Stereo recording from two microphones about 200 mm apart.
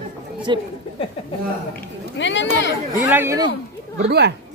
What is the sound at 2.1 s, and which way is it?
Speech, 65° left (ahead or behind).